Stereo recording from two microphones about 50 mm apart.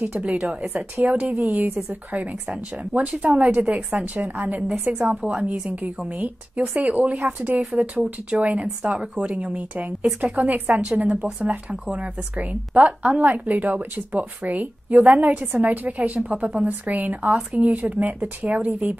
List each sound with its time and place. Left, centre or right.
0.1 s speech: right
1.0 s speech: right
5.0 s a woman's voice: centre
5.4 s speech: right
11.1 s a woman's voice: centre
11.8 s speech: right